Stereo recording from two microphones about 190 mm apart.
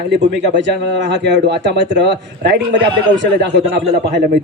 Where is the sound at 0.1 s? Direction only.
65° right (ahead or behind).